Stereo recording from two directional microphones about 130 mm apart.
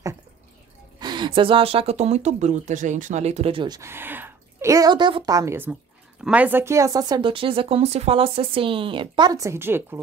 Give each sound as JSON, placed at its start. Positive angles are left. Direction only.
{"t": 0.9, "sound": "speech", "side_deg": -35}
{"t": 3.8, "sound": "speech", "side_deg": -15}